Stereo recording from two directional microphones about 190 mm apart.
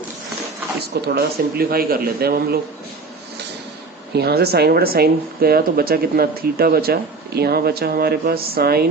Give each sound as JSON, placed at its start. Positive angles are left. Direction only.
{"t": 0.8, "sound": "speech", "side_deg": -60}
{"t": 4.1, "sound": "speech", "side_deg": -55}